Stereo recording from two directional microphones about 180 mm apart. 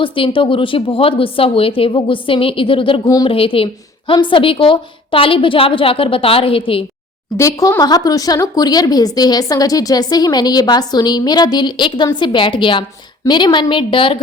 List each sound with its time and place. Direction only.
0.0 s speech: 30° left (ahead or behind)
7.3 s speech: 15° left (ahead or behind)